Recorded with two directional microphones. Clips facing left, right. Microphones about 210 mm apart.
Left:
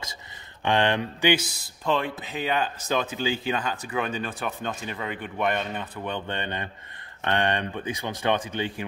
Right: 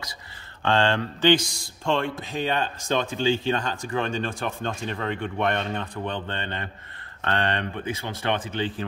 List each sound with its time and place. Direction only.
0.6 s speech: 15° left (ahead or behind)